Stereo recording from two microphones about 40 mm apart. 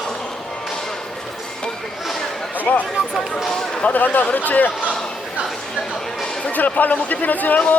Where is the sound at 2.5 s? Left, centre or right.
Left.